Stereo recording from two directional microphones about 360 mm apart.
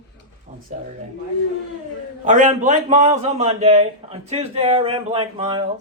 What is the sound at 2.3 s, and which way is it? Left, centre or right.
A man's voice, right.